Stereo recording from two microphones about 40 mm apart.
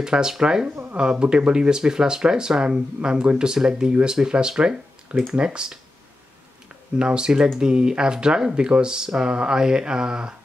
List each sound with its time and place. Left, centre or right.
0.0 s speech: centre
7.0 s speech: right